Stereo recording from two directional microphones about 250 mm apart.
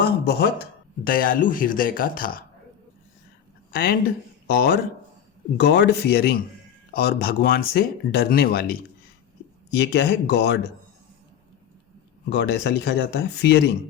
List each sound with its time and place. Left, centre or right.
0.0 s a man's voice: left
3.7 s a man's voice: left
12.3 s speech: left